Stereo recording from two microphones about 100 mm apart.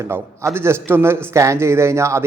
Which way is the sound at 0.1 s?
25° right (ahead or behind).